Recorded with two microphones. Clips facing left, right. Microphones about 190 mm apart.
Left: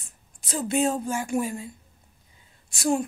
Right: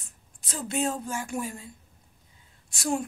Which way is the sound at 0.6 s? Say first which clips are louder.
Left 5 dB; 15° left (ahead or behind).